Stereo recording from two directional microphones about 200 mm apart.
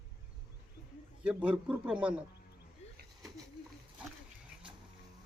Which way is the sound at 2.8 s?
30° left (ahead or behind).